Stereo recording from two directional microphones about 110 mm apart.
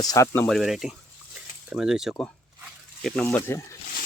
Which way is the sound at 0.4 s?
Centre (ahead or behind).